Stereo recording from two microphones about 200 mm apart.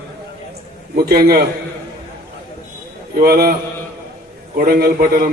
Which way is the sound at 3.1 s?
50° right (ahead or behind).